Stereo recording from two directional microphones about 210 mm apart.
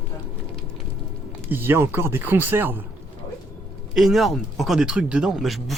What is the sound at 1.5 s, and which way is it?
Speech, 10° right (ahead or behind).